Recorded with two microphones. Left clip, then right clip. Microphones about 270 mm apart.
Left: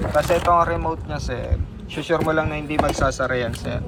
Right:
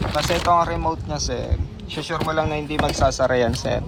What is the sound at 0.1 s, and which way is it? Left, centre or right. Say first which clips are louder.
Speech: left 2 dB; centre.